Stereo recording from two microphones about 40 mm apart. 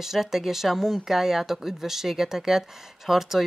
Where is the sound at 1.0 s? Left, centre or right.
Centre.